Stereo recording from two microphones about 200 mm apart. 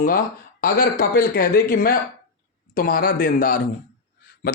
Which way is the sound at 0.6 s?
45° left (ahead or behind).